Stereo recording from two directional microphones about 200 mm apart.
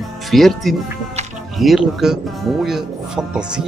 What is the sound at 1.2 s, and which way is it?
Music, 35° right (ahead or behind).